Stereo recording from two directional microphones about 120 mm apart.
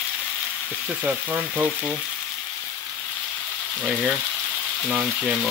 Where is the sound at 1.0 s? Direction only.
10° right (ahead or behind).